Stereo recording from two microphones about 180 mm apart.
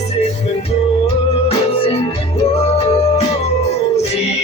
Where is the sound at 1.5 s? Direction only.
35° left (ahead or behind).